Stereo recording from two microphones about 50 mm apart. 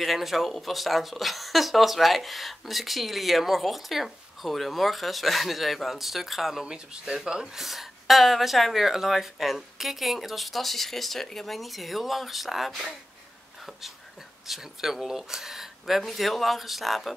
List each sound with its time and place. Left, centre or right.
0.0 s speech: centre
6.6 s speech: centre